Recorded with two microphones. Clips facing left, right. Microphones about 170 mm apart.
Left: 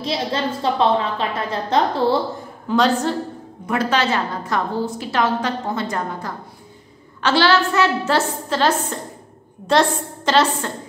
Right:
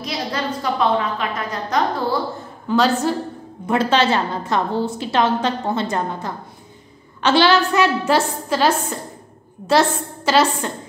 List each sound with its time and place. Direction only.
0.0 s a woman's voice: 25° left (ahead or behind)
2.7 s a woman's voice: 5° right (ahead or behind)
3.6 s a woman's voice: 25° right (ahead or behind); by 10.7 s 10° right (ahead or behind)